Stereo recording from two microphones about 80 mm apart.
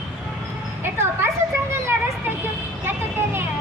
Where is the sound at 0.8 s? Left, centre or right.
Right.